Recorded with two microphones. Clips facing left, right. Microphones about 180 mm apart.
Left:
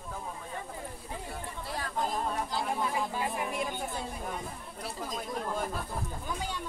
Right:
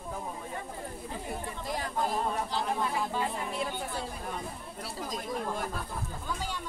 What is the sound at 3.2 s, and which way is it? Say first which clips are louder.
Chatter: even; 15° left (ahead or behind).